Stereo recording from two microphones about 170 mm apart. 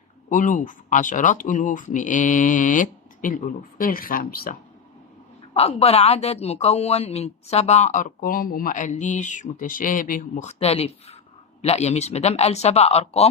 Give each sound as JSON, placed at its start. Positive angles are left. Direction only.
{"t": 0.3, "sound": "speech", "side_deg": 50}
{"t": 5.5, "sound": "a woman's voice", "side_deg": 35}